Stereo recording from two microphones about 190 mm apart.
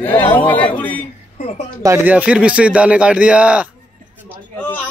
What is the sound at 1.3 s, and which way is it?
Speech, 35° left (ahead or behind).